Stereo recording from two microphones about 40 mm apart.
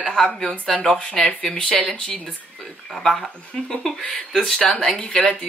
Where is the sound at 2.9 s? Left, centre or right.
Centre.